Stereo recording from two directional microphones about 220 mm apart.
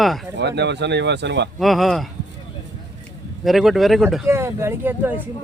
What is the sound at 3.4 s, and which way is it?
Speech, centre (ahead or behind).